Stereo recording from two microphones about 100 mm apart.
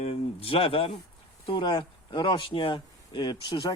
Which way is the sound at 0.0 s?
80° left.